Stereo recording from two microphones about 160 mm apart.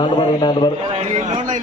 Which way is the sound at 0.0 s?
30° left (ahead or behind).